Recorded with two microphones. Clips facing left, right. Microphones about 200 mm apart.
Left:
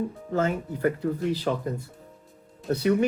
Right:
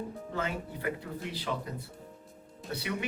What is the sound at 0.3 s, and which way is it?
Speech, 45° left (ahead or behind).